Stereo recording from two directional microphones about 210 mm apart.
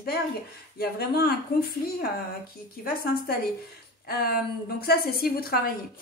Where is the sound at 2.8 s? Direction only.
45° left (ahead or behind).